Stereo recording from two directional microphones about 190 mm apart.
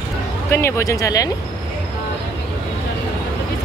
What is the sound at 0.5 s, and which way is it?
Speech, 15° left (ahead or behind).